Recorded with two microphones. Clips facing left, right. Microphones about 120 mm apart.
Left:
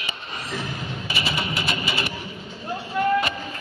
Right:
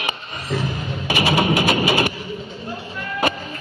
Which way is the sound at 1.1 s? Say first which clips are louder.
Right 11 dB; 60° right (ahead or behind).